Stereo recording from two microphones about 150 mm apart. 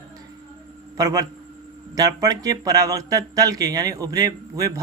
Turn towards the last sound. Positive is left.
turn(degrees=-25)  # may be behind; listen again after turning